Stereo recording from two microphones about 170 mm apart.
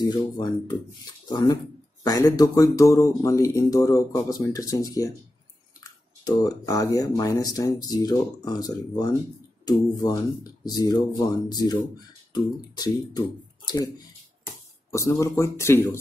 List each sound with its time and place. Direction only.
0.0 s speech: 25° left (ahead or behind)
6.2 s speech: 20° left (ahead or behind)